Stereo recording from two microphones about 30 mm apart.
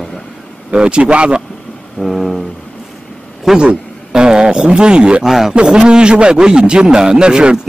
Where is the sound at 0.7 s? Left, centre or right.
Right.